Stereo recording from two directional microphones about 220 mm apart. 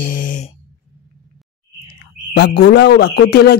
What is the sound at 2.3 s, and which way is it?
Speech, 50° left (ahead or behind).